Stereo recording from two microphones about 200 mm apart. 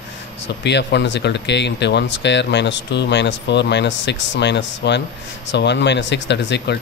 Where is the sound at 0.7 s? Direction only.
60° left (ahead or behind).